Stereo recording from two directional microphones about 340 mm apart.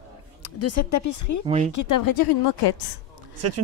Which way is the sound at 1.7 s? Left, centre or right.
Left.